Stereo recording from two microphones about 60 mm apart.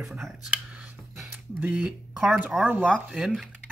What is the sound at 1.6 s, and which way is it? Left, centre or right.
Speech, right.